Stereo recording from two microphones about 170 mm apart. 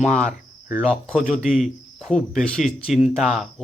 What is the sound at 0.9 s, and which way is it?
Speech, 5° left (ahead or behind).